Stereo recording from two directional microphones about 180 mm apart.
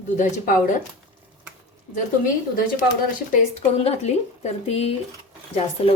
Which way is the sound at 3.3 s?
35° left (ahead or behind).